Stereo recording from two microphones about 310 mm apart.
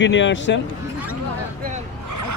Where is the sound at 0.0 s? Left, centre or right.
Left.